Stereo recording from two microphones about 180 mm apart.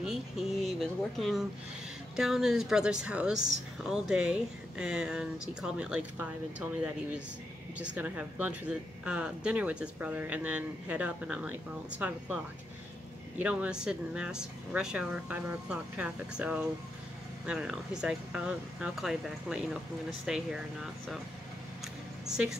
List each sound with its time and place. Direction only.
0.0 s speech: centre (ahead or behind)
7.8 s speech: 5° right (ahead or behind)
13.4 s speech: 5° right (ahead or behind)
22.2 s speech: 5° right (ahead or behind)